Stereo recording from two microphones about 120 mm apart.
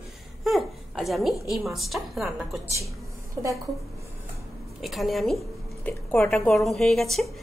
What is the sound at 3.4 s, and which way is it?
Speech, 25° right (ahead or behind).